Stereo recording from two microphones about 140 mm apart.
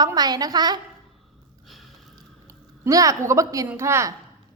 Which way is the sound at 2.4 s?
25° right (ahead or behind).